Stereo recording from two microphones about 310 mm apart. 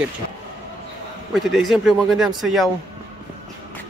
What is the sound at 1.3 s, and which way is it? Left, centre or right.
Speech, centre.